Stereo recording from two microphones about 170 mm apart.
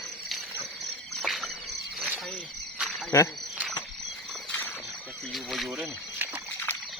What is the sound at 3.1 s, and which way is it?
Speech, 20° left (ahead or behind).